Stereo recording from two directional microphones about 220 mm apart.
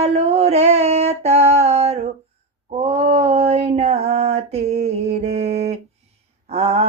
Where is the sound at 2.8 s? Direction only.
30° right (ahead or behind).